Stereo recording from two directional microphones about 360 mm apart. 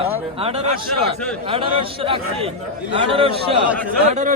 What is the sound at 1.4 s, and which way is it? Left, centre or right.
A man's voice, centre.